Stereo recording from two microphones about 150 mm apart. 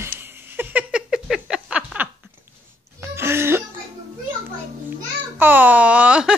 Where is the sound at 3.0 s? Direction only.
15° right (ahead or behind).